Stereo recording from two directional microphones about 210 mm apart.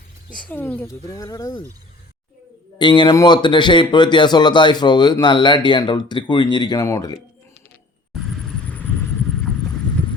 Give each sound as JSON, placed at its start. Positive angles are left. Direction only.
{"t": 0.3, "sound": "speech", "side_deg": 5}
{"t": 2.7, "sound": "speech", "side_deg": 20}